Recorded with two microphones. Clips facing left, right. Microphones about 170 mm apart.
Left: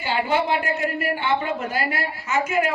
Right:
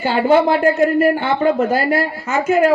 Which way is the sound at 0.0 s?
45° right (ahead or behind).